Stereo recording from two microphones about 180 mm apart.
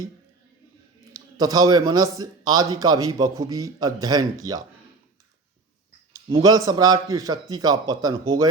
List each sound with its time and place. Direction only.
1.1 s a man's voice: 20° right (ahead or behind)
6.2 s a man's voice: 25° right (ahead or behind)